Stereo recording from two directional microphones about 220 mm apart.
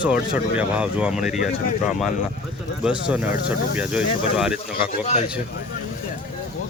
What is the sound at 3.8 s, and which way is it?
Speech, 5° right (ahead or behind).